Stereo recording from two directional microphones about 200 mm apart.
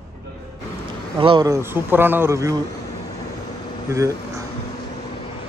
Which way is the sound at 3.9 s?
15° right (ahead or behind).